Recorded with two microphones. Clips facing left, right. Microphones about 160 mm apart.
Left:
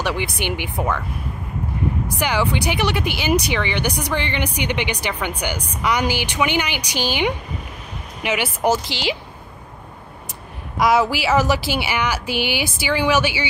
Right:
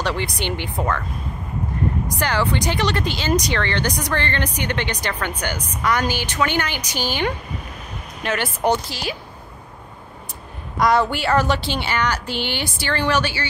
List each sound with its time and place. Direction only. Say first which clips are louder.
0.0 s a woman's voice: left 1 dB; 10° left (ahead or behind)
2.1 s a woman's voice: left 1 dB; 10° left (ahead or behind)
8.8 s a woman's voice: left 4 dB; 90° left
10.8 s a woman's voice: left 1 dB; 5° left (ahead or behind)